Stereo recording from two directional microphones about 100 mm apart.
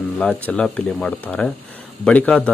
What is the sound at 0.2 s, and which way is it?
Speech, 15° left (ahead or behind).